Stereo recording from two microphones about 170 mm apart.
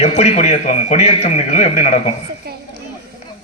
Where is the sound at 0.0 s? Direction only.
40° left (ahead or behind).